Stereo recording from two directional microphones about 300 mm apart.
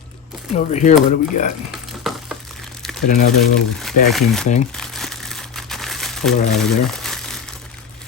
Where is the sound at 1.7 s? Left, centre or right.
Centre.